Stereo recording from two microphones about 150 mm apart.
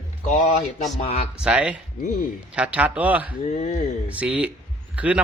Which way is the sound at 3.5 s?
50° left (ahead or behind).